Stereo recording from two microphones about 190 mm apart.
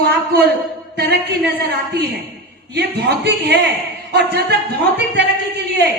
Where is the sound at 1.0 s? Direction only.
60° right (ahead or behind).